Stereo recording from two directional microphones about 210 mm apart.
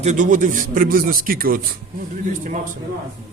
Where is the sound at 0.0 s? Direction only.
35° right (ahead or behind).